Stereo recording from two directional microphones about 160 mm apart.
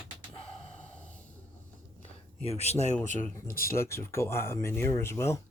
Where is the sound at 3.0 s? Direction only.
50° left (ahead or behind).